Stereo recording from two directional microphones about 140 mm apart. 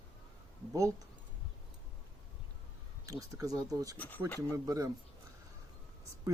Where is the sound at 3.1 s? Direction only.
25° right (ahead or behind).